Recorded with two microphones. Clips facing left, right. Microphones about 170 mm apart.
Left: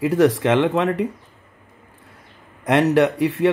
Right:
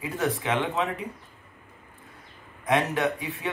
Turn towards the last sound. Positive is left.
turn(degrees=85)